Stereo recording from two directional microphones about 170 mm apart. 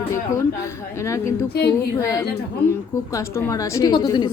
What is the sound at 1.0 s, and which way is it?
A woman's voice, 15° left (ahead or behind).